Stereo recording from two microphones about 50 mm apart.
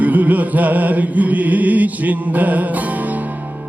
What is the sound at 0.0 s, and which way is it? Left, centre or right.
Music, right.